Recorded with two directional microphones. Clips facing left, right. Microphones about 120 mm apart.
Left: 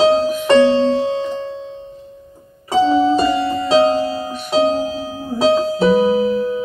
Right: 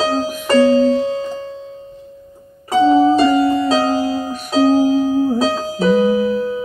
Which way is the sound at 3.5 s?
30° left (ahead or behind).